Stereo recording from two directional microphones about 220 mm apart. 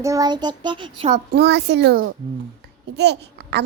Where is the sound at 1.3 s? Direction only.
50° right (ahead or behind).